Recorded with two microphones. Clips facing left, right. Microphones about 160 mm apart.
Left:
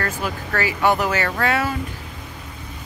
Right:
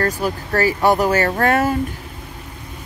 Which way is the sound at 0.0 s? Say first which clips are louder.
Right 5 dB; 40° right (ahead or behind).